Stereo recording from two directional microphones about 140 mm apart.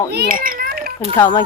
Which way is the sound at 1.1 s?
30° left (ahead or behind).